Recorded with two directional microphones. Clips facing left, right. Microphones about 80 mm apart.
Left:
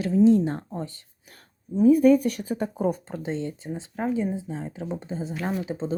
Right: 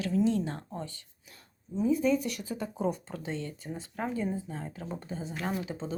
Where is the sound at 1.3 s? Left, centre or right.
Left.